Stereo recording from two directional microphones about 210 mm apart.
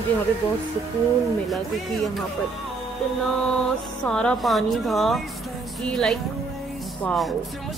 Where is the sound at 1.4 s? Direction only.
Centre (ahead or behind).